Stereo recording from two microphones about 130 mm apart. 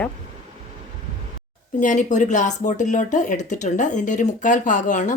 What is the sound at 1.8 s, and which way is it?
Speech, 75° left (ahead or behind).